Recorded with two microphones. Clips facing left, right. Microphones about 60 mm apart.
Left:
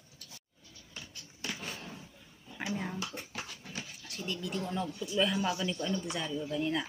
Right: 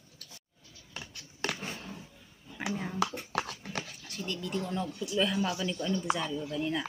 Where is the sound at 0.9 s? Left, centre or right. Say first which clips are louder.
Right 4 dB; right.